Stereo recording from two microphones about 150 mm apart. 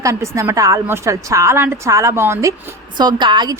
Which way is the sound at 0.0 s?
20° right (ahead or behind).